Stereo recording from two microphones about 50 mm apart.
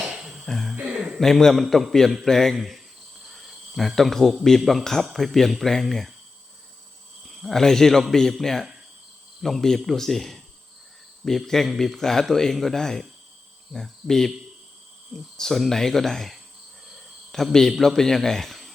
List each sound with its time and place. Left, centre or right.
0.4 s music: centre
0.8 s a sound: right
1.2 s a man's voice: centre
7.3 s a man's voice: centre